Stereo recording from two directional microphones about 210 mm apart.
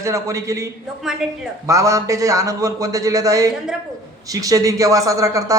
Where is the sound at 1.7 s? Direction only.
15° right (ahead or behind).